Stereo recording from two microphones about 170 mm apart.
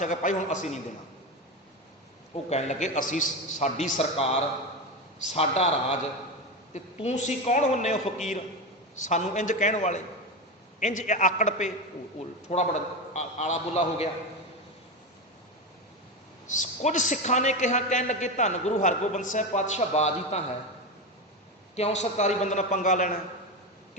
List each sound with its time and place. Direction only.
0.0 s a man's voice: 50° left (ahead or behind)
2.3 s a man's voice: 40° left (ahead or behind)
9.0 s a man's voice: 45° left (ahead or behind)
16.5 s a man's voice: 45° left (ahead or behind)
21.8 s a man's voice: 40° left (ahead or behind)